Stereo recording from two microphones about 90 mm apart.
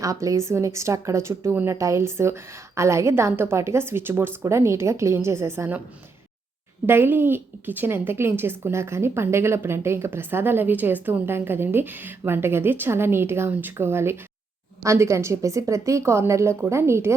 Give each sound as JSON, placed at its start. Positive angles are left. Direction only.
{"t": 0.0, "sound": "a woman's voice", "side_deg": -40}
{"t": 6.8, "sound": "a woman's voice", "side_deg": -25}